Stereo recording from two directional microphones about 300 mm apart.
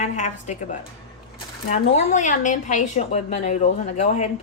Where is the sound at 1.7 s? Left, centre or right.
Left.